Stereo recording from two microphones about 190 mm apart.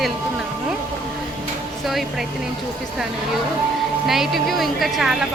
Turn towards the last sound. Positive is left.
turn(degrees=0)  # may be behind; listen again after turning